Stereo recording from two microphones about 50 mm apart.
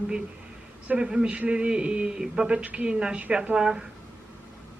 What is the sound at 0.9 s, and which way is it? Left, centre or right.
A man's voice, centre.